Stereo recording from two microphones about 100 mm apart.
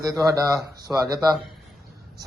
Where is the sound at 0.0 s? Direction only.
35° right (ahead or behind).